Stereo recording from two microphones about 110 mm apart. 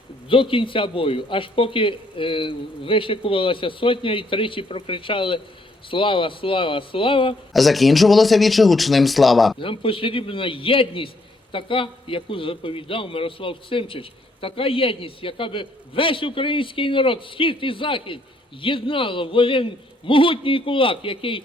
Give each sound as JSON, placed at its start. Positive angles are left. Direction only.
{"t": 0.3, "sound": "a man's voice", "side_deg": 55}
{"t": 7.5, "sound": "speech", "side_deg": 0}
{"t": 9.6, "sound": "a man's voice", "side_deg": 50}